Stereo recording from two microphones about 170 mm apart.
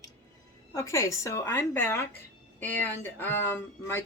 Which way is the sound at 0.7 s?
15° left (ahead or behind).